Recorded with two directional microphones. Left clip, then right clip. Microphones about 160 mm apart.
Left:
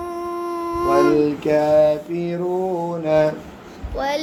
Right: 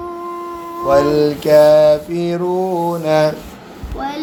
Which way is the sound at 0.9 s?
50° right (ahead or behind).